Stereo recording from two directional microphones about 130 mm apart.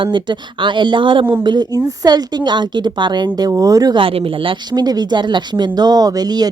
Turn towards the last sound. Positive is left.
turn(degrees=-30)  # may be behind; listen again after turning